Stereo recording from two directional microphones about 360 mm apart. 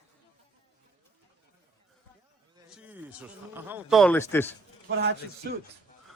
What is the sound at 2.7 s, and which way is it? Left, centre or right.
Speech, centre.